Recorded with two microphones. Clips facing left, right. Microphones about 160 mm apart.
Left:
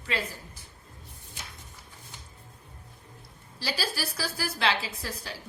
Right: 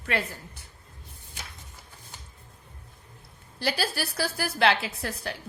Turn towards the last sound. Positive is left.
turn(degrees=-60)  # may be behind; listen again after turning